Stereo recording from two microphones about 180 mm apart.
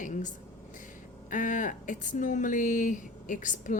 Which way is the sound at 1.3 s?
45° left (ahead or behind).